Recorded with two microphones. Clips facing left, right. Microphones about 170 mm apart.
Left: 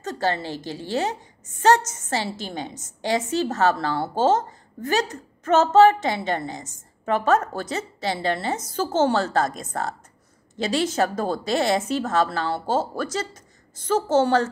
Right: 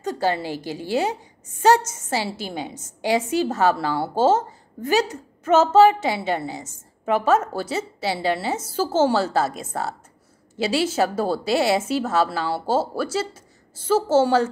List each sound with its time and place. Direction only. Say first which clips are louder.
0.0 s a woman's voice: right 2 dB; 10° right (ahead or behind)